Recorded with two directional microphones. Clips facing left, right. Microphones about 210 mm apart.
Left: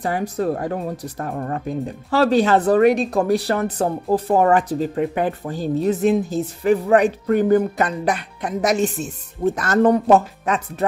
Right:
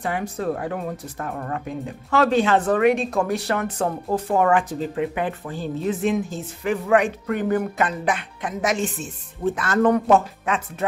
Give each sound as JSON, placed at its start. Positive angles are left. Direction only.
{"t": 0.0, "sound": "speech", "side_deg": 35}